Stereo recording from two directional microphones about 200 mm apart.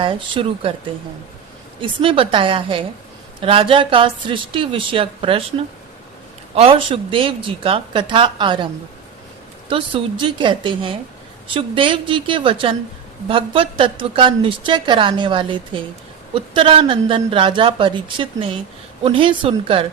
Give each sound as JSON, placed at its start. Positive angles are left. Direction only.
{"t": 0.0, "sound": "a woman's voice", "side_deg": -25}
{"t": 1.8, "sound": "a woman's voice", "side_deg": -25}